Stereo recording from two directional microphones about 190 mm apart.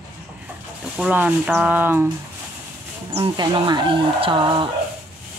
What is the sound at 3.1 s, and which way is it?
Speech, 25° right (ahead or behind).